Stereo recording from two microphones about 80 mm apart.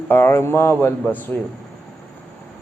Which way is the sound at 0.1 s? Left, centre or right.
Left.